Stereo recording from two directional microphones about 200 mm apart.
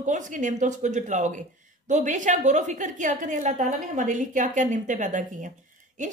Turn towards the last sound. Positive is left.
turn(degrees=-40)  # may be behind; listen again after turning